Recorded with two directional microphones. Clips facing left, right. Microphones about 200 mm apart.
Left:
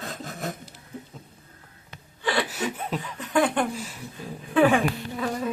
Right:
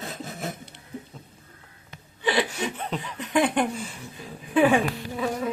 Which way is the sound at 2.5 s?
5° left (ahead or behind).